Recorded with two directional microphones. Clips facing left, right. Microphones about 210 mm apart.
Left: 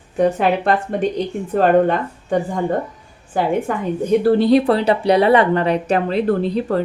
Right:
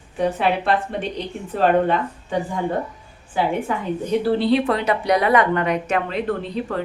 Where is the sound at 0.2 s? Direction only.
45° left (ahead or behind).